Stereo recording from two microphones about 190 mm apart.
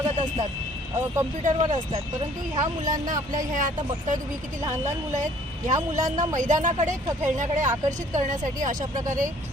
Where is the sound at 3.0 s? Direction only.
45° right (ahead or behind).